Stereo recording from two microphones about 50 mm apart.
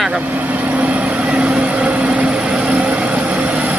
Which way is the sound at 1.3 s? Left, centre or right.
Right.